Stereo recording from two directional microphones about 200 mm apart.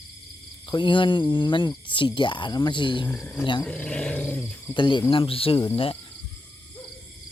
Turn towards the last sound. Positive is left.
turn(degrees=25)  # may be behind; listen again after turning